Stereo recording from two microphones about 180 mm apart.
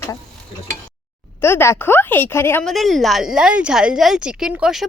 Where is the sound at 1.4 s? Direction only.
15° left (ahead or behind).